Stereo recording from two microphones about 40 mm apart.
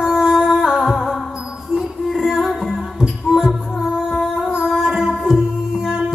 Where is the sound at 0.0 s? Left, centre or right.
Centre.